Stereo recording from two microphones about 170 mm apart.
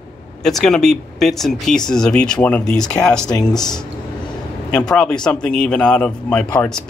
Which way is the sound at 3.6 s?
25° left (ahead or behind).